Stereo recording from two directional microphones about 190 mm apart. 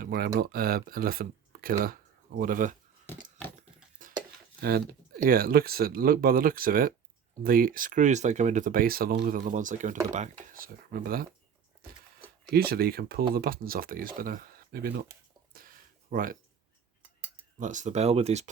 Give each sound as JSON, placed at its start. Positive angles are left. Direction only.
{"t": 0.0, "sound": "speech", "side_deg": -50}
{"t": 4.0, "sound": "stir", "side_deg": -45}
{"t": 4.6, "sound": "speech", "side_deg": -55}
{"t": 12.5, "sound": "speech", "side_deg": -55}
{"t": 15.5, "sound": "a sound", "side_deg": -50}
{"t": 17.6, "sound": "speech", "side_deg": -40}